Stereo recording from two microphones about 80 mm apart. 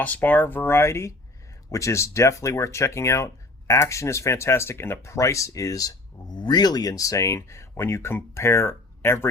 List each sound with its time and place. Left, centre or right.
0.0 s speech: left